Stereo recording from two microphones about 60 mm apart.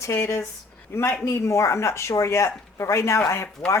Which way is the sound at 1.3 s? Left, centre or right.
Left.